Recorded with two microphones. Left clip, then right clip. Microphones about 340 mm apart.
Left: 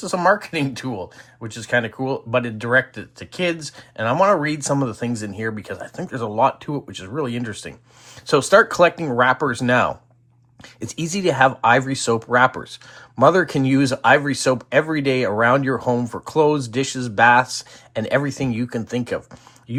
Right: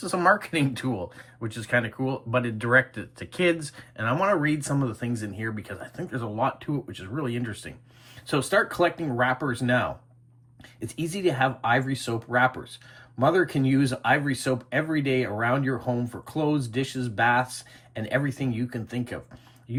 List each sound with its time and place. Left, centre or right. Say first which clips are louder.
0.0 s speech: left 4 dB; centre